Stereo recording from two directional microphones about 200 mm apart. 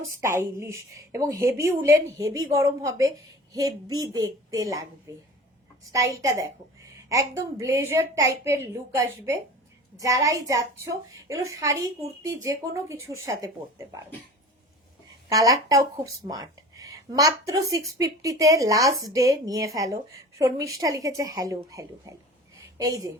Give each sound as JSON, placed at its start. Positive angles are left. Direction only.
{"t": 0.2, "sound": "speech", "side_deg": -15}
{"t": 15.3, "sound": "speech", "side_deg": -15}